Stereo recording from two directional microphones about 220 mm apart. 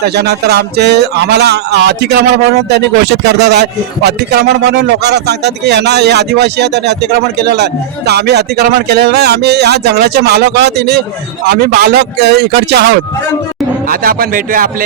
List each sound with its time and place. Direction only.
0.0 s speech: 45° right (ahead or behind)